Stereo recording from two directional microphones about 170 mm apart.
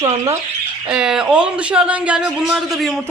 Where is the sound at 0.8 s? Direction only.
5° right (ahead or behind).